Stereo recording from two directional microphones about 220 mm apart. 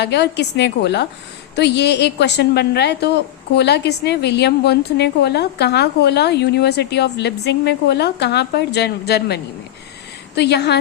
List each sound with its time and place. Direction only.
0.0 s a woman's voice: 50° left (ahead or behind)